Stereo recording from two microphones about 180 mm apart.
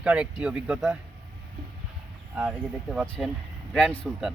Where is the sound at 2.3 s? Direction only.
5° right (ahead or behind).